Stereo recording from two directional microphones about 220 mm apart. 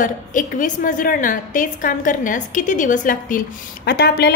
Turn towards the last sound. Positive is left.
turn(degrees=45)  # may be behind; listen again after turning